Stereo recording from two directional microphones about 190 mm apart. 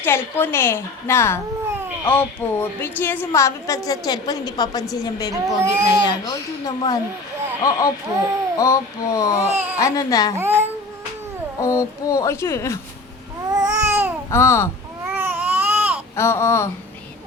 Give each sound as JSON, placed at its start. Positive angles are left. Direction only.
{"t": 0.0, "sound": "a woman's voice", "side_deg": 10}
{"t": 5.3, "sound": "speech", "side_deg": -15}
{"t": 6.1, "sound": "a woman's voice", "side_deg": 20}
{"t": 10.3, "sound": "speech", "side_deg": -10}
{"t": 11.6, "sound": "a woman's voice", "side_deg": 15}
{"t": 13.5, "sound": "babbling", "side_deg": -20}
{"t": 14.3, "sound": "a woman's voice", "side_deg": 15}
{"t": 15.1, "sound": "baby cry", "side_deg": -10}
{"t": 16.1, "sound": "a woman's voice", "side_deg": 15}